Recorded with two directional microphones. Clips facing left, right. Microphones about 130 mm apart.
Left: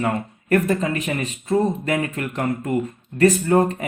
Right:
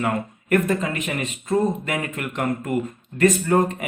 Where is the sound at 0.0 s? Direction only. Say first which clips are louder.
Left 1 dB; 35° left (ahead or behind).